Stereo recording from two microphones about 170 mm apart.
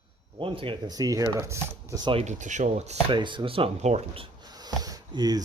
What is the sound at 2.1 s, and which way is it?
Speech, 40° right (ahead or behind).